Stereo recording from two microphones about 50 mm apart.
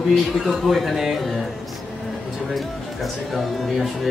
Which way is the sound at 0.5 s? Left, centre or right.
Centre.